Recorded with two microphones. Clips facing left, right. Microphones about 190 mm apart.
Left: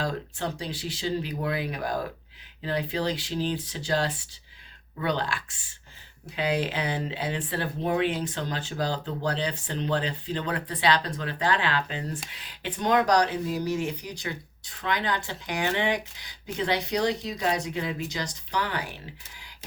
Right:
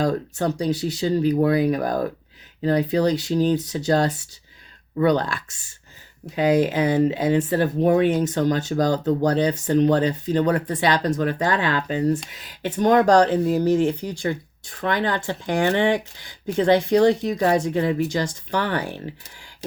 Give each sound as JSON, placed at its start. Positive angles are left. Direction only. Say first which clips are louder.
{"t": 0.1, "sound": "speech", "louder": "right 9 dB", "side_deg": -45}